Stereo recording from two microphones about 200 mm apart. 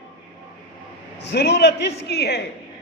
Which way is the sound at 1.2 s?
60° left (ahead or behind).